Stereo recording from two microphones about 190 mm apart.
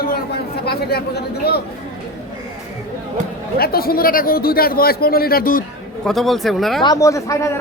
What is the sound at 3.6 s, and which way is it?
A man's voice, 55° left (ahead or behind).